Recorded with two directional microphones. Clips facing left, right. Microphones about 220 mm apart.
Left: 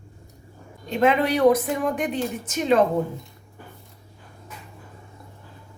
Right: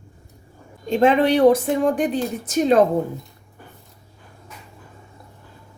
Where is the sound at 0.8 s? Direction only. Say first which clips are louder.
Right 4 dB; 30° right (ahead or behind).